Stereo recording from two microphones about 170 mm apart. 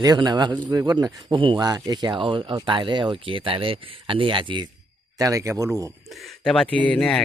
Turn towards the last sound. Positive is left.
turn(degrees=5)  # may be behind; listen again after turning